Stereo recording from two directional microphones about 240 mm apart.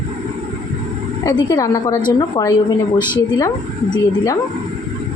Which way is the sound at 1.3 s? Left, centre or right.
Centre.